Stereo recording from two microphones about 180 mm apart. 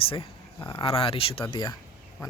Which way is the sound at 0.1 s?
30° left (ahead or behind).